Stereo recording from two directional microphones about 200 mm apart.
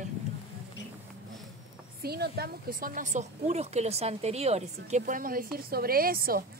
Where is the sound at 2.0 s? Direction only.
50° right (ahead or behind).